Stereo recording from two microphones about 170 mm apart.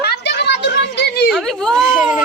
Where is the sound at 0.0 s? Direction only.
80° left.